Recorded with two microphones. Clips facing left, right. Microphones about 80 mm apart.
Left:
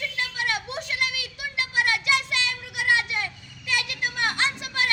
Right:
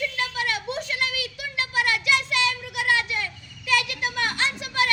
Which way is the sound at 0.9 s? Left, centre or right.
Right.